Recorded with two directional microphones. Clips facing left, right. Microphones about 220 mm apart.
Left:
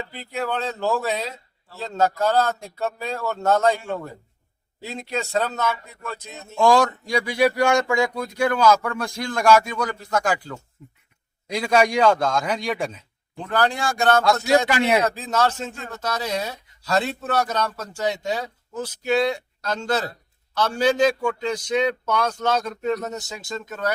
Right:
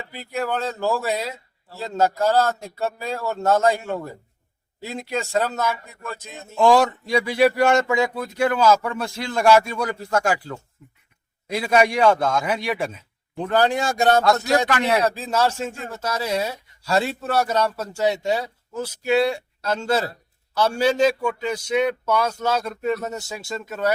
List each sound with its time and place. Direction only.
0.1 s speech: 10° right (ahead or behind)
5.0 s speech: 10° right (ahead or behind)
11.4 s speech: 5° right (ahead or behind)
13.5 s speech: 20° right (ahead or behind)
14.7 s speech: 10° left (ahead or behind)
15.3 s speech: 10° right (ahead or behind)